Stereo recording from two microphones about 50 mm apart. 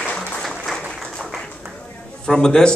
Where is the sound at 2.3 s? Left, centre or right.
Centre.